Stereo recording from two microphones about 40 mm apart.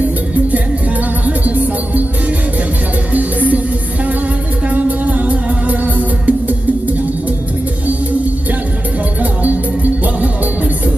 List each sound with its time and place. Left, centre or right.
1.2 s music: right
3.1 s music: right
4.6 s music: right
9.4 s music: right